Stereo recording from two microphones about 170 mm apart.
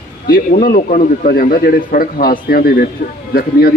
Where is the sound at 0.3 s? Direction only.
55° left (ahead or behind).